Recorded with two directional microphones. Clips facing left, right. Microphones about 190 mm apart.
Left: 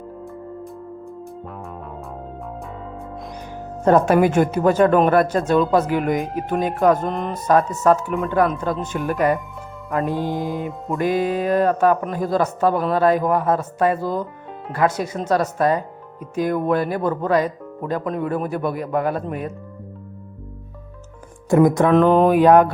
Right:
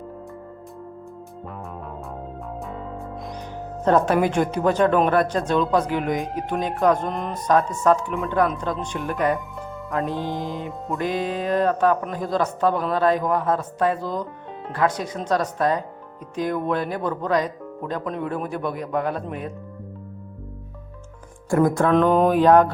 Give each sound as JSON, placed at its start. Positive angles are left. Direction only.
{"t": 3.8, "sound": "speech", "side_deg": 10}
{"t": 9.9, "sound": "music", "side_deg": 5}
{"t": 16.3, "sound": "speech", "side_deg": 5}
{"t": 21.5, "sound": "music", "side_deg": 20}
{"t": 21.9, "sound": "music", "side_deg": 0}